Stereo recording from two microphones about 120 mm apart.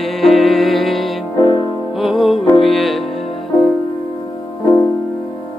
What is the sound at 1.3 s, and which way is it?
Music, 40° left (ahead or behind).